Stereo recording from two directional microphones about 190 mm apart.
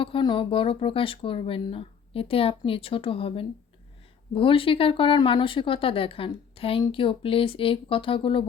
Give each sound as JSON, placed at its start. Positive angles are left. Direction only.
{"t": 0.0, "sound": "speech", "side_deg": 25}